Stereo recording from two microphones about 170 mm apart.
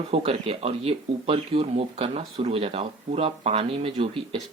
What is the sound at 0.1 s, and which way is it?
Speech, 35° right (ahead or behind).